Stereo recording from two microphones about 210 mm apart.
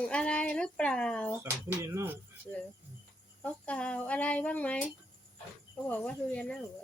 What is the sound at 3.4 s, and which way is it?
Speech, 5° left (ahead or behind).